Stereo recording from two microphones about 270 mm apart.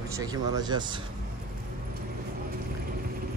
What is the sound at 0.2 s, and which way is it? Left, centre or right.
Speech, centre.